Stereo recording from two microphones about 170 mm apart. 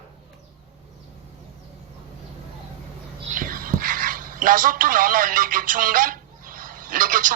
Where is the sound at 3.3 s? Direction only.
55° right (ahead or behind).